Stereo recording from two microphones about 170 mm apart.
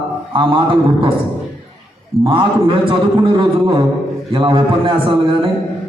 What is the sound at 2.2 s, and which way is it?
A man's voice, 30° right (ahead or behind).